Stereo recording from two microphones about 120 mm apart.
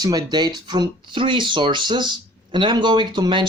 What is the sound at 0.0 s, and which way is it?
Speech, 35° right (ahead or behind).